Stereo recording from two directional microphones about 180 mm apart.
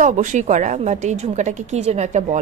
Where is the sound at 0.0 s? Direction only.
45° right (ahead or behind).